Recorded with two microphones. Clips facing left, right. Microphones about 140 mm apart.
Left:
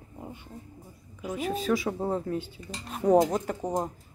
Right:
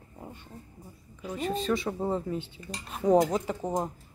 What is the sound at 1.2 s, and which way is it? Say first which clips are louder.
Speech: left 1 dB; 5° left (ahead or behind).